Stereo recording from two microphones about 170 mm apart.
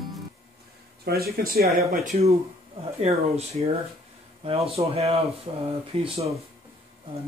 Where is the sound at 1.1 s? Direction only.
65° right (ahead or behind).